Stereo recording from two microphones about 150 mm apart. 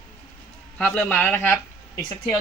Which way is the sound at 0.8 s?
5° left (ahead or behind).